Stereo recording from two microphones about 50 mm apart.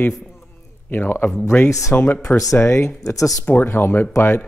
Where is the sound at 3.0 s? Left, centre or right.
Left.